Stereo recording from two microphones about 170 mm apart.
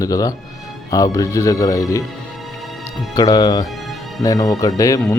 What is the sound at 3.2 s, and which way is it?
Speech, 25° left (ahead or behind).